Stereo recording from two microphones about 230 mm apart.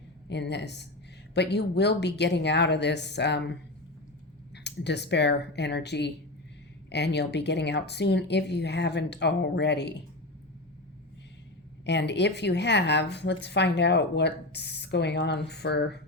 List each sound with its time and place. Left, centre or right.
0.3 s speech: left
4.5 s speech: left
11.9 s speech: left